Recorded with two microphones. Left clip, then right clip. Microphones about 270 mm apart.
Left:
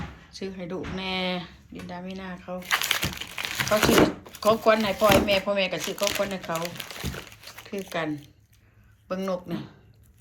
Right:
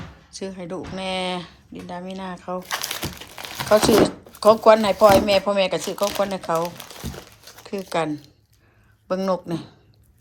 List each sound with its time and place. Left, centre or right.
0.3 s speech: centre
7.4 s crumpling: centre
7.9 s speech: centre